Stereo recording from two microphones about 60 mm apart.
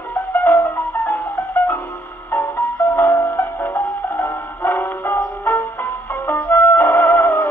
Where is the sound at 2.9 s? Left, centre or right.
Left.